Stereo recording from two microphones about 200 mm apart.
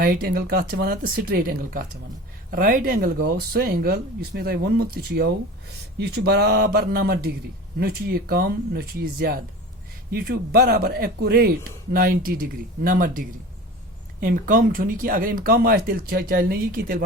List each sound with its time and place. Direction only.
0.0 s speech: 50° right (ahead or behind)